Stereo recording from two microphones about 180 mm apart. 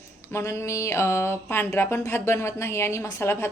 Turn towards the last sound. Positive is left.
turn(degrees=15)  # may be behind; listen again after turning